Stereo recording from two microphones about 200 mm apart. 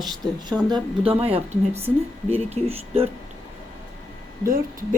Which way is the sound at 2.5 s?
30° right (ahead or behind).